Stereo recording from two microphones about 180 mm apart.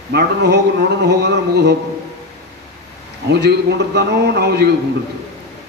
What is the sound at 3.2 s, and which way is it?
A man's voice, 70° right (ahead or behind).